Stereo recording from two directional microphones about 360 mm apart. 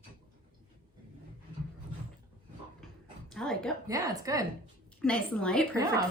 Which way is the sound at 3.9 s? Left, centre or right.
Centre.